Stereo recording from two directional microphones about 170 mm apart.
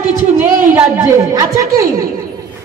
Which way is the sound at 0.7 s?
20° right (ahead or behind).